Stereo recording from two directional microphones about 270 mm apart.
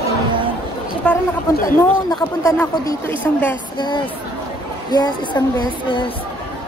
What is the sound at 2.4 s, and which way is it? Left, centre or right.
A woman's voice, centre.